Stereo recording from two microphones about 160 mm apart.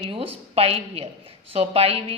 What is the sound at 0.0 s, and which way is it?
A woman's voice, 35° right (ahead or behind).